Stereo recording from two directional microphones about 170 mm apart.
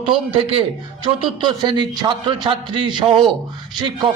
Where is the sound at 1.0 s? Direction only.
25° right (ahead or behind).